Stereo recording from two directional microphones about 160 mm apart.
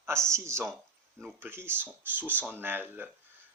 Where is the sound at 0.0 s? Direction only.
15° right (ahead or behind).